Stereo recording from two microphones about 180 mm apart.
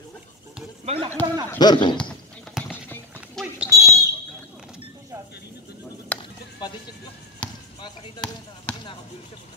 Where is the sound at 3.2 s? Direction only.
5° right (ahead or behind).